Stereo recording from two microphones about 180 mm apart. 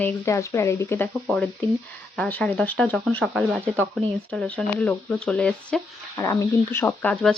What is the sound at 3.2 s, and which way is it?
Speech, 5° right (ahead or behind).